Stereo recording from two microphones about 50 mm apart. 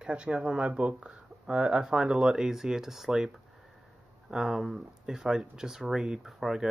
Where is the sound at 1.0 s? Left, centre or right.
Right.